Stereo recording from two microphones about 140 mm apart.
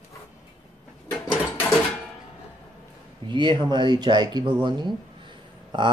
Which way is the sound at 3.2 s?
35° right (ahead or behind).